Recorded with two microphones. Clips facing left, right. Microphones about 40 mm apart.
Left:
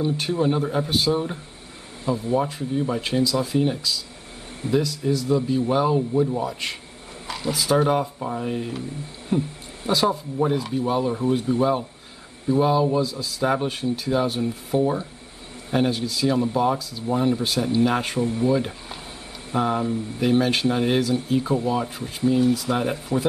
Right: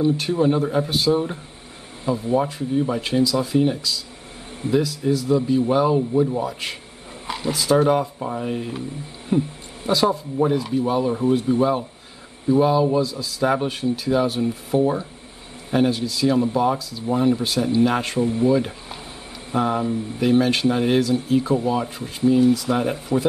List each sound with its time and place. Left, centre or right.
0.0 s speech: centre
7.2 s speech: right
7.5 s speech: centre